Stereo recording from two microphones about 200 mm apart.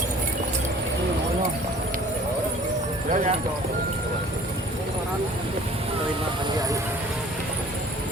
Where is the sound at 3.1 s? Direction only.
35° right (ahead or behind).